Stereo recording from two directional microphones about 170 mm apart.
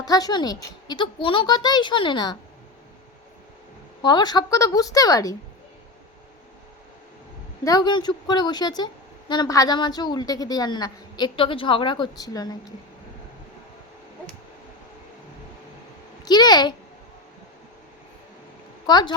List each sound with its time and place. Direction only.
0.0 s a woman's voice: 20° left (ahead or behind)
4.0 s a woman's voice: 25° left (ahead or behind)
7.6 s a woman's voice: 20° left (ahead or behind)
16.2 s a woman's voice: 25° left (ahead or behind)
18.9 s a woman's voice: 25° left (ahead or behind)